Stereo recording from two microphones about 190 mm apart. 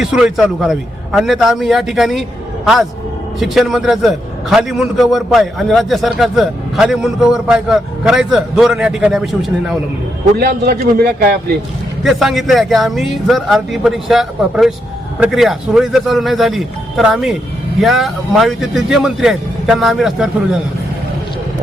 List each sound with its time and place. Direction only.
0.0 s a man's voice: 5° right (ahead or behind)
3.4 s a man's voice: centre (ahead or behind)
10.3 s a man's voice: 55° right (ahead or behind)
12.0 s a man's voice: centre (ahead or behind)